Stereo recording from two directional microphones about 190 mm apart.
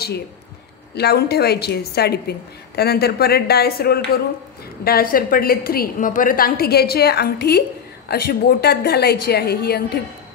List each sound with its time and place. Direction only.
0.9 s a woman's voice: 55° left (ahead or behind)